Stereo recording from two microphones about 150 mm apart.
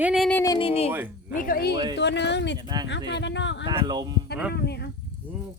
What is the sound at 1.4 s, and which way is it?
Speech, 75° left (ahead or behind).